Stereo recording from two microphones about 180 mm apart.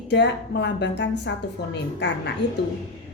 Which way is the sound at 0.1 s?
75° left (ahead or behind).